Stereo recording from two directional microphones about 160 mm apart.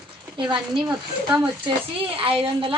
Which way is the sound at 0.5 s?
30° right (ahead or behind).